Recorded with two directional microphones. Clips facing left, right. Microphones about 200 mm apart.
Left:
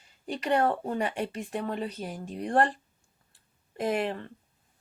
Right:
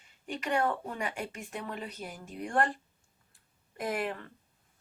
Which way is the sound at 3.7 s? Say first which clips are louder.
Left 5 dB; 25° left (ahead or behind).